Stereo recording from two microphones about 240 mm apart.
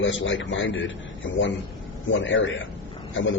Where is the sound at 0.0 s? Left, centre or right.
Left.